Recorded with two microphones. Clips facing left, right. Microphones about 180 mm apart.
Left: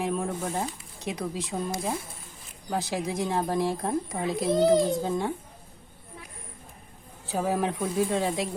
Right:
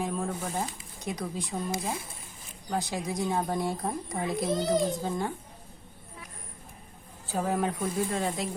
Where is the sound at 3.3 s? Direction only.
Centre (ahead or behind).